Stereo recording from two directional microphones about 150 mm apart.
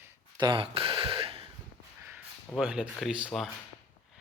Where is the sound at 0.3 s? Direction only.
30° right (ahead or behind).